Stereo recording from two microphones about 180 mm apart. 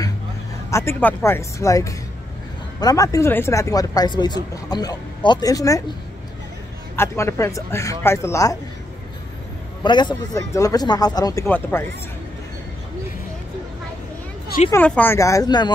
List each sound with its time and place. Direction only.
0.7 s speech: 15° left (ahead or behind)
7.0 s speech: 15° left (ahead or behind)
9.8 s speech: 25° left (ahead or behind)
14.7 s speech: 10° left (ahead or behind)